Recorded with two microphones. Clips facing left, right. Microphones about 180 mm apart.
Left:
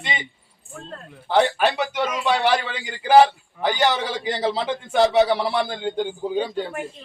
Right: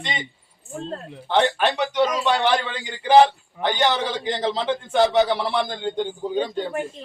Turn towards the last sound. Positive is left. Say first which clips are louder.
# even
turn(degrees=5)  # may be behind; listen again after turning